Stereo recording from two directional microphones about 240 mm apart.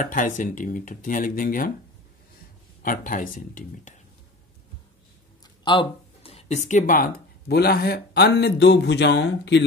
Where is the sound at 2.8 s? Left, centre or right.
Left.